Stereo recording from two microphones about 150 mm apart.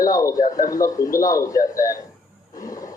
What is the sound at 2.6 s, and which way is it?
Wild animals, 25° left (ahead or behind).